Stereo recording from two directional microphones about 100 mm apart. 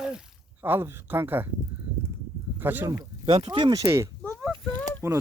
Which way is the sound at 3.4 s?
50° right (ahead or behind).